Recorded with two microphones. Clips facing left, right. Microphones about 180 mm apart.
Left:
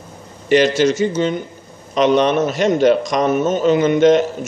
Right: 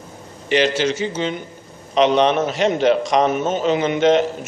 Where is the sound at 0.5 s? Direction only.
45° left (ahead or behind).